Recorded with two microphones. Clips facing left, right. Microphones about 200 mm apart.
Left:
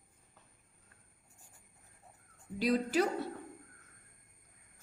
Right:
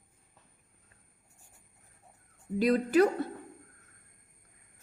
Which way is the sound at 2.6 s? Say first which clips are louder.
Right 6 dB; 55° right (ahead or behind).